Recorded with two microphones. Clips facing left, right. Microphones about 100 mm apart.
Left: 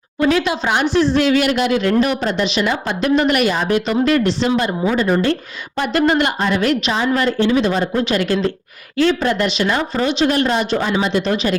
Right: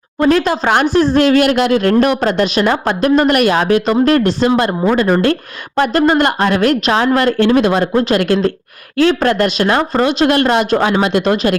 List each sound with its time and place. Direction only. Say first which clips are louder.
0.2 s speech: right 4 dB; 45° right (ahead or behind)